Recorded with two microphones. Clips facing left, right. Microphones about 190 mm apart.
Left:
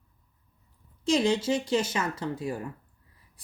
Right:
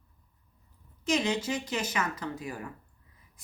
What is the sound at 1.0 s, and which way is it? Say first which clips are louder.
A woman's voice: left 4 dB; 30° left (ahead or behind).